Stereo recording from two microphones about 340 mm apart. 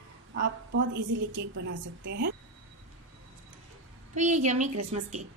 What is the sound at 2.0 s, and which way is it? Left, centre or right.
Speech, right.